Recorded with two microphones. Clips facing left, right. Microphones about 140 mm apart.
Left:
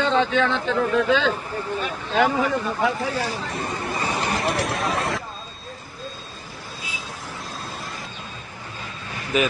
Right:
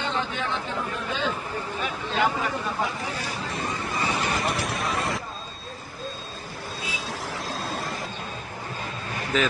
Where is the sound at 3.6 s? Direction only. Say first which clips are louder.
Left 1 dB; 50° left (ahead or behind).